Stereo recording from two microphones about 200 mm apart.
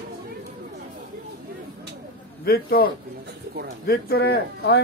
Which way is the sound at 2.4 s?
50° left (ahead or behind).